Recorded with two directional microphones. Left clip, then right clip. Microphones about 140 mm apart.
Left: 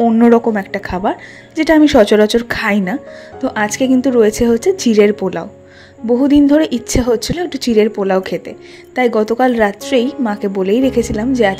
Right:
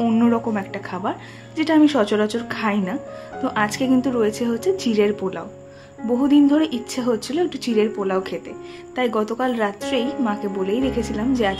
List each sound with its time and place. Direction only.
0.2 s a woman's voice: 40° left (ahead or behind)
3.3 s speech: 35° left (ahead or behind)